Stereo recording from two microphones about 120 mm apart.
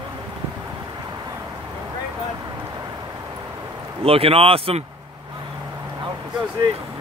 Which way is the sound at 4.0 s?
55° right (ahead or behind).